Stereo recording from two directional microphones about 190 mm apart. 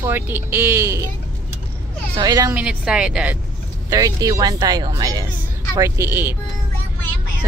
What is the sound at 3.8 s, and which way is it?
A woman's voice, 20° right (ahead or behind).